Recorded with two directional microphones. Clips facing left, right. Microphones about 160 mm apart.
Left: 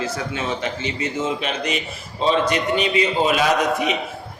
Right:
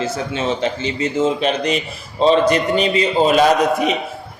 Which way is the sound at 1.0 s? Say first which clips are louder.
Right 8 dB; 35° right (ahead or behind).